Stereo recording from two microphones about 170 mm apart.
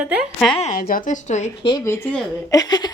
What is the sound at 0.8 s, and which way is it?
Speech, 55° left (ahead or behind).